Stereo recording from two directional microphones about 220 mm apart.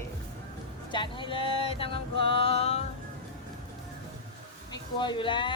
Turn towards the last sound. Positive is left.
turn(degrees=20)  # may be behind; listen again after turning